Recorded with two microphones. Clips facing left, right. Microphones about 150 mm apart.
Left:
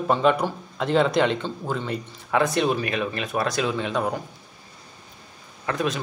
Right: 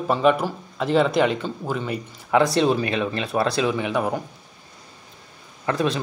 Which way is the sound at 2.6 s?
30° right (ahead or behind).